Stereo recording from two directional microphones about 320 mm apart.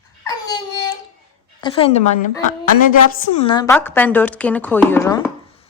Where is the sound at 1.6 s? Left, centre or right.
Centre.